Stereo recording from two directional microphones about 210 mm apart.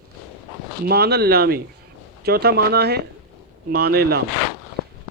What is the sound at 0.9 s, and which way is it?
Speech, 50° right (ahead or behind).